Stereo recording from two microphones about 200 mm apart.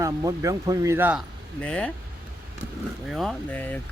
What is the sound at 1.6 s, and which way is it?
Speech, 5° left (ahead or behind).